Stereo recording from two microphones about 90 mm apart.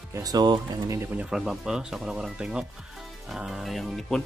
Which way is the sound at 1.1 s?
5° right (ahead or behind).